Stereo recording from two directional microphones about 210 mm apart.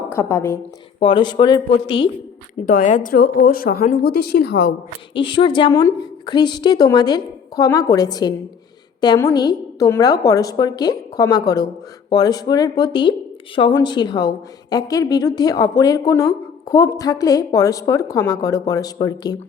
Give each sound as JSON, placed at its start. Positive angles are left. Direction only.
{"t": 0.1, "sound": "a woman's voice", "side_deg": 10}
{"t": 0.9, "sound": "a woman's voice", "side_deg": 25}
{"t": 2.6, "sound": "a woman's voice", "side_deg": 40}
{"t": 5.1, "sound": "a woman's voice", "side_deg": 25}